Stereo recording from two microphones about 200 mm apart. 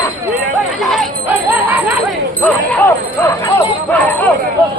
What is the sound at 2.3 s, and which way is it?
Speech, 10° left (ahead or behind).